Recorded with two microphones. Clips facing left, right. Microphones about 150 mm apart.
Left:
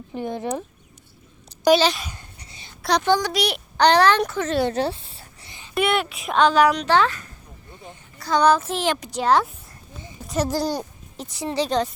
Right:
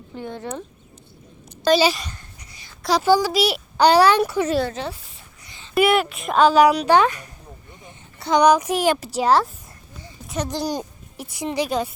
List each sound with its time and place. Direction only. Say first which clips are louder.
0.1 s speech: left 4 dB; 15° left (ahead or behind)
1.8 s speech: right 2 dB; 5° right (ahead or behind)
2.5 s a sound: left 1 dB; 25° left (ahead or behind)
2.8 s speech: right 3 dB; 5° right (ahead or behind)
4.7 s a sound: left 6 dB; 30° left (ahead or behind)
5.7 s a child's voice: right 4 dB; 5° right (ahead or behind)
10.7 s speech: even; 15° right (ahead or behind)